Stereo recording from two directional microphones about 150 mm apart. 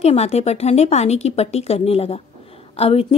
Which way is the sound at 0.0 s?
45° left (ahead or behind).